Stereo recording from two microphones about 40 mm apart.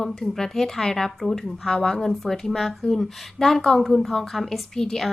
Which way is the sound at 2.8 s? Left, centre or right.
Centre.